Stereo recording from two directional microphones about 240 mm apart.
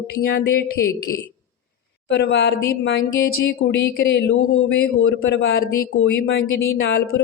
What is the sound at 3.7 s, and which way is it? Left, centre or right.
Speech, left.